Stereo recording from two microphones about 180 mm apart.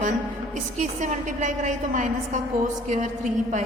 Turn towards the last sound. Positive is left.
turn(degrees=-40)  # may be behind; listen again after turning